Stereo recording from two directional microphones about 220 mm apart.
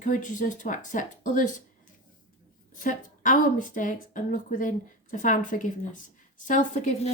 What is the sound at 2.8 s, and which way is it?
Speech, 35° left (ahead or behind).